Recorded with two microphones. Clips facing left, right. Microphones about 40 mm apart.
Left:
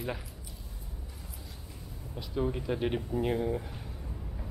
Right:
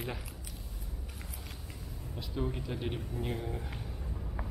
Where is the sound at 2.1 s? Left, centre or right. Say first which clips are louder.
Left 4 dB; centre.